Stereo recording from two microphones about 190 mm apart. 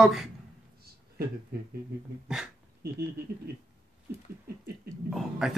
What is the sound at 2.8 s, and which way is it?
Speech, 55° right (ahead or behind).